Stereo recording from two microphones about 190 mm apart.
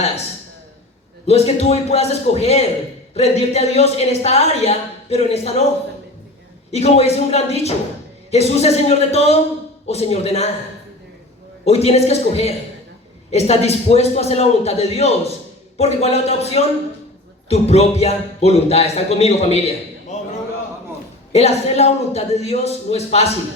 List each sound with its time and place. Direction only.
1.3 s speech: 35° left (ahead or behind)
6.7 s speech: 35° left (ahead or behind)
11.6 s speech: 35° left (ahead or behind)
21.3 s speech: 35° left (ahead or behind)